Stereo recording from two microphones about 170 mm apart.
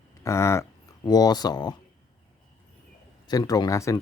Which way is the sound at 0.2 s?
15° left (ahead or behind).